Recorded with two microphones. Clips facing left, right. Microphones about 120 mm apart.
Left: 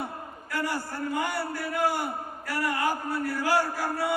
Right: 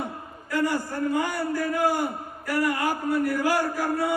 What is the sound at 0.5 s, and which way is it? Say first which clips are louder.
A man's voice: right 5 dB; 20° right (ahead or behind).